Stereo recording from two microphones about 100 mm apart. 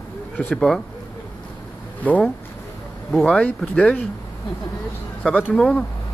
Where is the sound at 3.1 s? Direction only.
10° left (ahead or behind).